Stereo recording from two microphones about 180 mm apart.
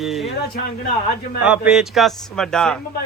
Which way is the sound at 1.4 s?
5° right (ahead or behind).